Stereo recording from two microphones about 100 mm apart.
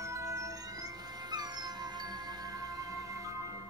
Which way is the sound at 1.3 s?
40° right (ahead or behind).